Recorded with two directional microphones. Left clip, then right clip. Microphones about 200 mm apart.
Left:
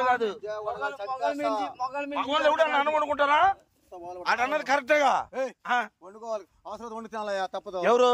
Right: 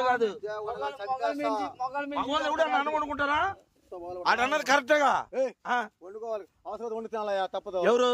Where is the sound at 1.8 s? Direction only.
50° left (ahead or behind).